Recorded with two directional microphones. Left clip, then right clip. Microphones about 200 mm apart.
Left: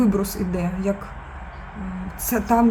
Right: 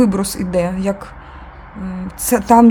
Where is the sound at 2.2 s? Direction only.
50° right (ahead or behind).